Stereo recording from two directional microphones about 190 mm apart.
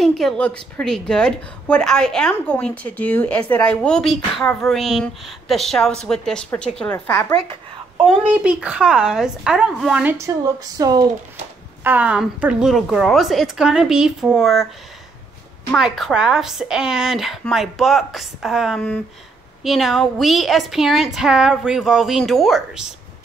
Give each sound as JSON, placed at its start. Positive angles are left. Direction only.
{"t": 0.0, "sound": "a woman's voice", "side_deg": 5}
{"t": 8.0, "sound": "a woman's voice", "side_deg": -5}
{"t": 11.8, "sound": "a woman's voice", "side_deg": -10}
{"t": 15.7, "sound": "a woman's voice", "side_deg": 0}